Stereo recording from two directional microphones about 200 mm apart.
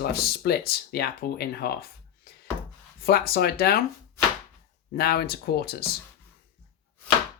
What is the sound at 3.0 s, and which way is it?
Speech, 50° left (ahead or behind).